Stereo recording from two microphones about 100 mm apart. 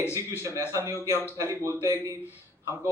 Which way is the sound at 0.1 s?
30° right (ahead or behind).